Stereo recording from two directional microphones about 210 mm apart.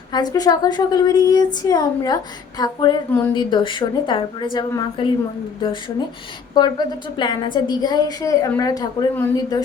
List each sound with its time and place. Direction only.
0.1 s a woman's voice: 20° left (ahead or behind)
6.5 s a woman's voice: 20° left (ahead or behind)